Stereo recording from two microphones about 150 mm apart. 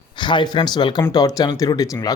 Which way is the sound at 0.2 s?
30° left (ahead or behind).